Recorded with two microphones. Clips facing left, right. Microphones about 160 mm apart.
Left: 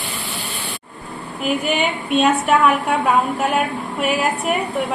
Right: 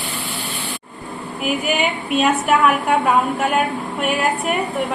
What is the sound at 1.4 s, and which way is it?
A woman's voice, 5° right (ahead or behind).